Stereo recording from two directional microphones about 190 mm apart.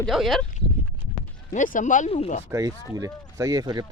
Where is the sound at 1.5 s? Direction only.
40° left (ahead or behind).